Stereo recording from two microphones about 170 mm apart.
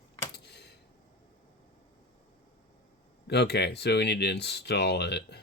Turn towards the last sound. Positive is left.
turn(degrees=80)